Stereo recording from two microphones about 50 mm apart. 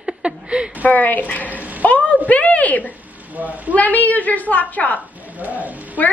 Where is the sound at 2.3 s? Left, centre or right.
Left.